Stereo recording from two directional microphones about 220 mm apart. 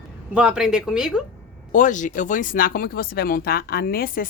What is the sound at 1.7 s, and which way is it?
Speech, 35° left (ahead or behind).